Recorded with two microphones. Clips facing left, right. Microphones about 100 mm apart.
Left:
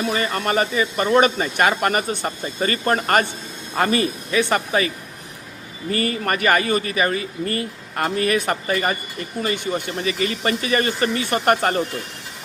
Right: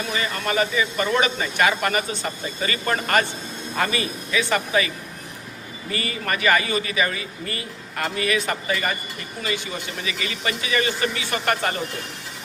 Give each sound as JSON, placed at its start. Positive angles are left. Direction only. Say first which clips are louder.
{"t": 0.1, "sound": "speech", "louder": "left 4 dB", "side_deg": 40}
{"t": 5.9, "sound": "speech", "louder": "left 5 dB", "side_deg": 45}